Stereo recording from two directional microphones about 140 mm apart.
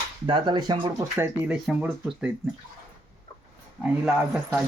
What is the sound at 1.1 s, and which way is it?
Speech, 10° right (ahead or behind).